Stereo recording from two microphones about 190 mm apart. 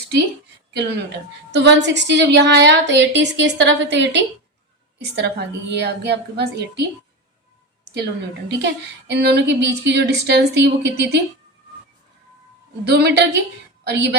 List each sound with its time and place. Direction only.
0.7 s a woman's voice: 60° right (ahead or behind)
8.6 s speech: 65° right (ahead or behind)
12.8 s speech: 60° right (ahead or behind)